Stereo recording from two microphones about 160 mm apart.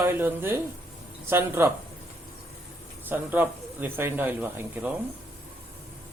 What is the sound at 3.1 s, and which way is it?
Speech, 10° right (ahead or behind).